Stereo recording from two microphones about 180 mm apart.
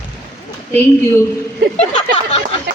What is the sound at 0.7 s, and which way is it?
Speech, 10° left (ahead or behind).